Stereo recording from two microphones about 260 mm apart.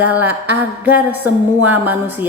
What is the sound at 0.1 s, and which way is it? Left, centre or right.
Speech, centre.